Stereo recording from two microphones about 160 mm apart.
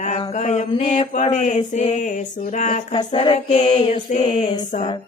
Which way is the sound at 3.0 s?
35° left (ahead or behind).